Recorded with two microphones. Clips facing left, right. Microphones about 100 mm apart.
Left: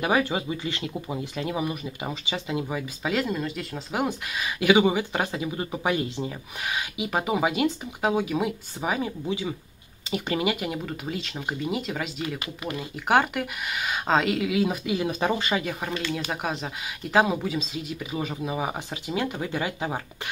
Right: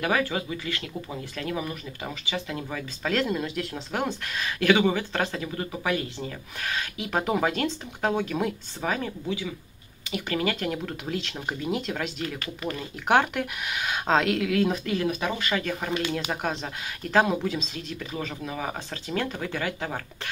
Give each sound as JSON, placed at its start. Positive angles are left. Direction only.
{"t": 0.0, "sound": "speech", "side_deg": 20}
{"t": 12.4, "sound": "speech", "side_deg": 15}
{"t": 13.1, "sound": "speech", "side_deg": 5}
{"t": 15.0, "sound": "speech", "side_deg": 30}
{"t": 15.9, "sound": "speech", "side_deg": -15}
{"t": 16.3, "sound": "speech", "side_deg": 0}